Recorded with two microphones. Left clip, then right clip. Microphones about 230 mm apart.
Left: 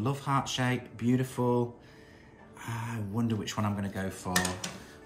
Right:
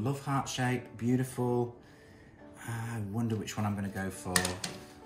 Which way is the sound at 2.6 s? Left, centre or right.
Centre.